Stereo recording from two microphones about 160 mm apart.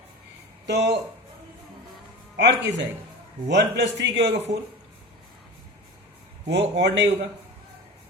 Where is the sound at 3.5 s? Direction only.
90° right.